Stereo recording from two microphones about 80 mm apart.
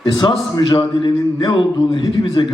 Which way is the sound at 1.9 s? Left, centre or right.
Left.